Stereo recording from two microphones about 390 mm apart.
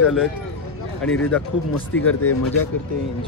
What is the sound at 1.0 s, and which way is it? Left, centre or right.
Speech, left.